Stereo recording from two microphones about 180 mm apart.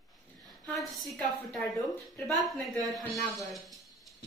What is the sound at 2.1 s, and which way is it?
Speech, 10° left (ahead or behind).